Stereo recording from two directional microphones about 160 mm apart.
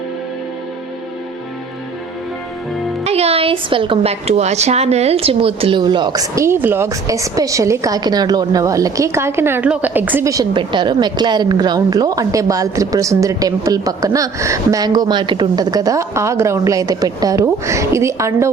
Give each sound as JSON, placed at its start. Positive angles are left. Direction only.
{"t": 3.0, "sound": "speech", "side_deg": -40}